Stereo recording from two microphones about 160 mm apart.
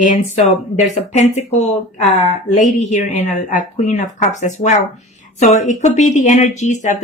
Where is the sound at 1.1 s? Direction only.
45° left (ahead or behind).